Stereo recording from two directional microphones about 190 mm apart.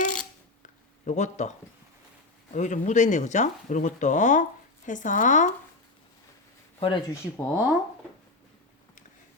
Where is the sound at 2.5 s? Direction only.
40° left (ahead or behind).